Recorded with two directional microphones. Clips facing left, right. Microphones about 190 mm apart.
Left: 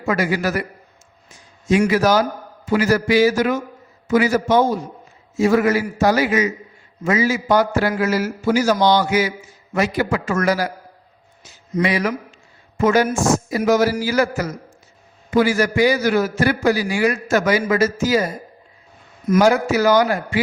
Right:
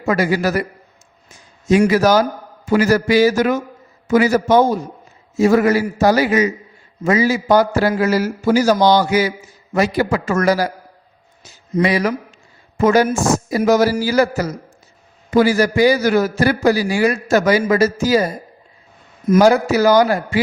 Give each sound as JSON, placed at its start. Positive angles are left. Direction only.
{"t": 0.0, "sound": "a man's voice", "side_deg": -40}
{"t": 1.6, "sound": "a man's voice", "side_deg": -40}
{"t": 11.7, "sound": "a man's voice", "side_deg": -35}
{"t": 19.3, "sound": "a man's voice", "side_deg": -35}